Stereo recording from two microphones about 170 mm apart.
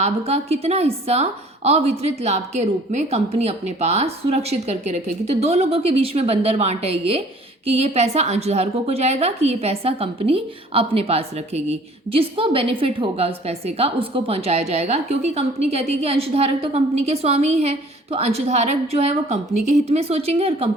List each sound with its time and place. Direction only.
0.0 s a woman's voice: 40° right (ahead or behind)